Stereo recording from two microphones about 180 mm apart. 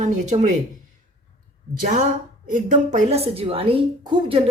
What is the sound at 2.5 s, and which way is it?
A woman's voice, 45° right (ahead or behind).